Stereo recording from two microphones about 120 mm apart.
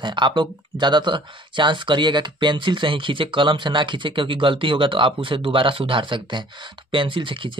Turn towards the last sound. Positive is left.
turn(degrees=-45)  # may be behind; listen again after turning